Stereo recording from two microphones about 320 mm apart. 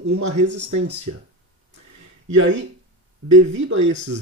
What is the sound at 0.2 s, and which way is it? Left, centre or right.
Speech, right.